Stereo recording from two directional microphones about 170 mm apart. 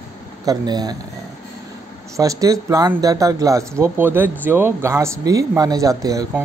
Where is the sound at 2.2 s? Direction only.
20° right (ahead or behind).